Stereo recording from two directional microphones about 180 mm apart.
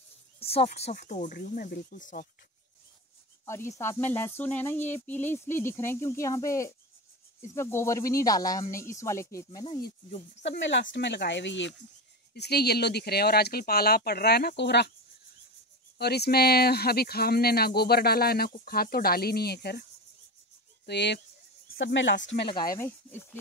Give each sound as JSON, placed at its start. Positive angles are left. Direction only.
{"t": 0.4, "sound": "speech", "side_deg": 35}
{"t": 3.4, "sound": "speech", "side_deg": 15}
{"t": 10.4, "sound": "speech", "side_deg": 80}
{"t": 12.4, "sound": "speech", "side_deg": 65}
{"t": 16.0, "sound": "speech", "side_deg": 60}
{"t": 21.7, "sound": "speech", "side_deg": 90}
{"t": 22.3, "sound": "speech", "side_deg": 30}
{"t": 22.8, "sound": "speech", "side_deg": 10}